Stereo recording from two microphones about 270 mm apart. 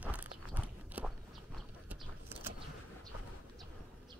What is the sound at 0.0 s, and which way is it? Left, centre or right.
Walk, centre.